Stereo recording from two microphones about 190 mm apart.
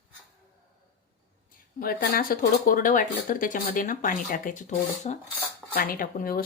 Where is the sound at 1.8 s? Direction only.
50° left (ahead or behind).